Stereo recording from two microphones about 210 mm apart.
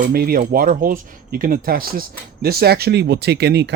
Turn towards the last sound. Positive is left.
turn(degrees=-50)  # may be behind; listen again after turning